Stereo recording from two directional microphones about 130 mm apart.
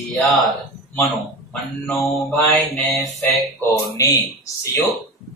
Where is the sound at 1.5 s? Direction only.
Centre (ahead or behind).